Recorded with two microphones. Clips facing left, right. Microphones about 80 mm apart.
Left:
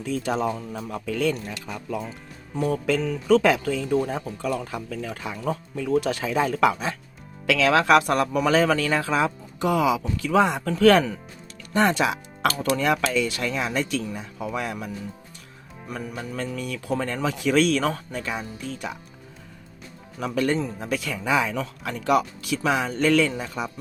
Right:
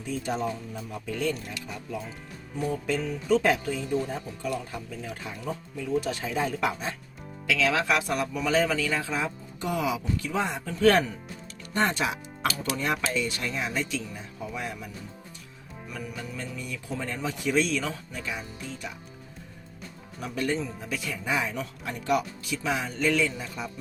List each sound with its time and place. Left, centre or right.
0.0 s speech: left
2.6 s speech: left
7.4 s speech: left
15.9 s speech: left
16.4 s speech: left
20.1 s speech: left
20.6 s speech: left